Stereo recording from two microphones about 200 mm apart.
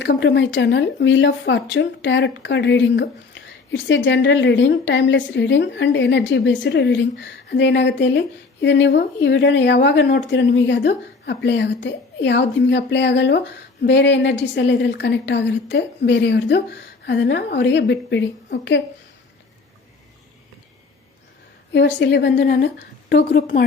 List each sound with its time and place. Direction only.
0.0 s speech: 60° left (ahead or behind)
21.7 s speech: 60° left (ahead or behind)